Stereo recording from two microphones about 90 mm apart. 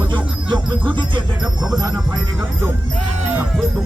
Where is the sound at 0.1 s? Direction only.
60° right (ahead or behind).